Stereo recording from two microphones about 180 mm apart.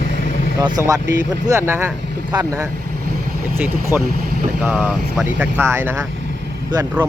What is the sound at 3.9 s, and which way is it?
Speech, 10° right (ahead or behind).